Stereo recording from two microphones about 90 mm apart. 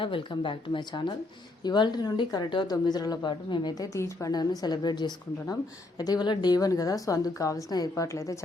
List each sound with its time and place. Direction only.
0.0 s a woman's voice: 70° left (ahead or behind); by 3.8 s 55° left (ahead or behind)
3.9 s a woman's voice: 35° left (ahead or behind)
4.3 s a woman's voice: 50° left (ahead or behind); by 8.4 s 35° left (ahead or behind)